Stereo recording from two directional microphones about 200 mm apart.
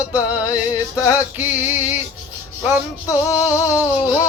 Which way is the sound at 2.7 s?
15° left (ahead or behind).